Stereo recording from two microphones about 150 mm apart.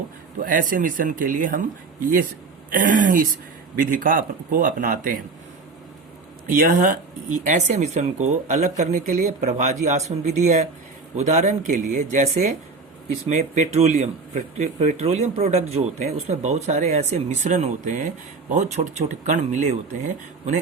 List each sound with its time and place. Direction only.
0.3 s speech: 65° right (ahead or behind)
6.6 s speech: 60° right (ahead or behind)